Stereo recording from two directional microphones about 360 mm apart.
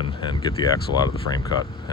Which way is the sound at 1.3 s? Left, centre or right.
Left.